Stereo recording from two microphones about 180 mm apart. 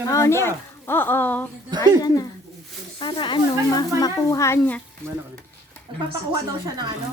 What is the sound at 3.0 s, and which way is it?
Speech, 25° left (ahead or behind).